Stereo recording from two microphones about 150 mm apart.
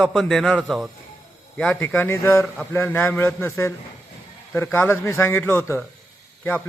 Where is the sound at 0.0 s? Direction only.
Centre (ahead or behind).